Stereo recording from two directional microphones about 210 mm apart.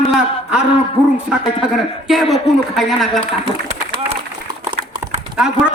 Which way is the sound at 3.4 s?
25° right (ahead or behind).